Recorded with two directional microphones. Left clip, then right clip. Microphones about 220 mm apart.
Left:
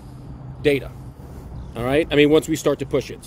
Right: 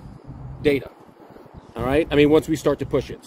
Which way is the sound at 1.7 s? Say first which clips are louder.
Left 1 dB; 15° right (ahead or behind).